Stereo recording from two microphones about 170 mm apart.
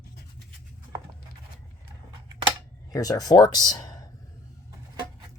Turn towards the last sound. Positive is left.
turn(degrees=20)  # may be behind; listen again after turning